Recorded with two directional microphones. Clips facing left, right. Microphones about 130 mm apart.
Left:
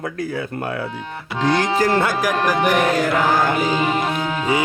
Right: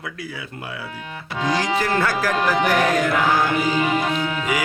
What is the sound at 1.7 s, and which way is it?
Speech, 35° left (ahead or behind).